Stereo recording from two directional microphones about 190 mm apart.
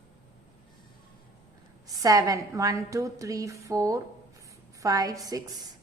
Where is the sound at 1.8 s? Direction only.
20° right (ahead or behind).